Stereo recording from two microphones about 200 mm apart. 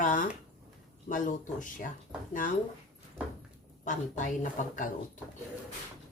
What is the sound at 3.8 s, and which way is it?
Speech, 40° left (ahead or behind).